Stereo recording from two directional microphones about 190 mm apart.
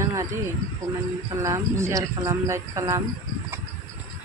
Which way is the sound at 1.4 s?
15° right (ahead or behind).